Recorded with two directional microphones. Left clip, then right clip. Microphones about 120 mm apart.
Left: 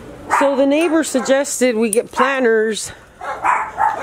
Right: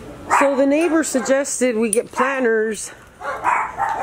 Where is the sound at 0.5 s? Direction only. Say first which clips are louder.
Left 2 dB; 10° left (ahead or behind).